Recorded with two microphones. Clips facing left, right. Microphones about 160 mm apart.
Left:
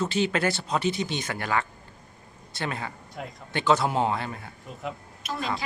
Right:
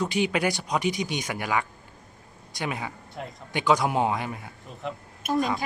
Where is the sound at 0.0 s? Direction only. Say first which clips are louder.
Even; 15° right (ahead or behind).